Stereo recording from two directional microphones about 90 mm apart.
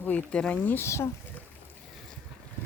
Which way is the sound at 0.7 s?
30° left (ahead or behind).